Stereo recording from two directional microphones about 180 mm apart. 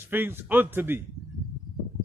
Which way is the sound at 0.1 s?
10° right (ahead or behind).